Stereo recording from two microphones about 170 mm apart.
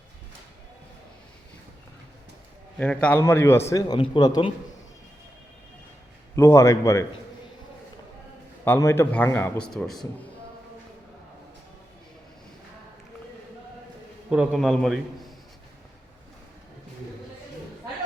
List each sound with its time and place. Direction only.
2.7 s a man's voice: 5° left (ahead or behind); by 4.5 s 25° left (ahead or behind)
6.3 s a man's voice: 15° left (ahead or behind)
8.6 s a man's voice: 15° left (ahead or behind)
14.3 s a man's voice: 5° right (ahead or behind)